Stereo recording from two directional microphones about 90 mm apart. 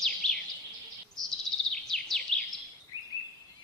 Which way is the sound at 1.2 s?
40° right (ahead or behind).